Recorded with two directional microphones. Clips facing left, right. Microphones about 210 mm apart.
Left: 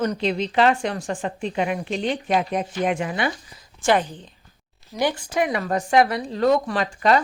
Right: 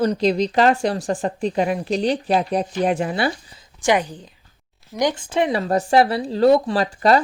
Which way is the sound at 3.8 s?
15° right (ahead or behind).